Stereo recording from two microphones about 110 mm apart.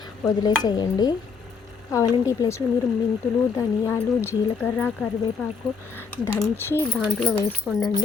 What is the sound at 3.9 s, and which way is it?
Speech, 20° left (ahead or behind).